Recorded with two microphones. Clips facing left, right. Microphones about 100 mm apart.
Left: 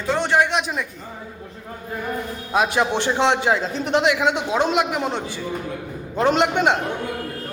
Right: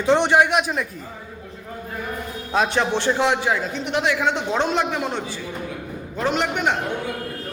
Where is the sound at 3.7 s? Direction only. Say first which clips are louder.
Left 4 dB; 35° left (ahead or behind).